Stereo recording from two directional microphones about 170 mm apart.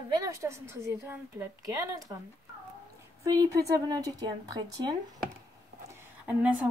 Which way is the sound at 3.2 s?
20° right (ahead or behind).